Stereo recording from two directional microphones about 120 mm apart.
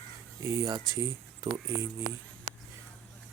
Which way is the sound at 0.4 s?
25° right (ahead or behind).